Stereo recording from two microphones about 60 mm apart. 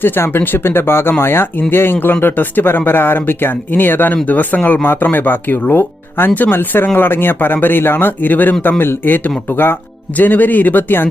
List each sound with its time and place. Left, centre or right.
0.0 s speech: left